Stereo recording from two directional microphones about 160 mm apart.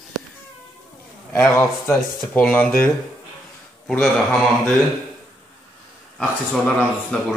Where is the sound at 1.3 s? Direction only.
15° left (ahead or behind).